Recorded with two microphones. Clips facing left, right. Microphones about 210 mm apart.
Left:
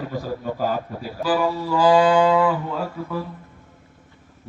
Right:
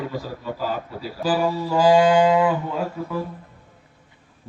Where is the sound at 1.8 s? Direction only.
20° right (ahead or behind).